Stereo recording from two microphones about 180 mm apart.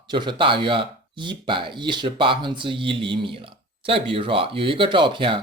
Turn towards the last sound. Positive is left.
turn(degrees=-25)  # may be behind; listen again after turning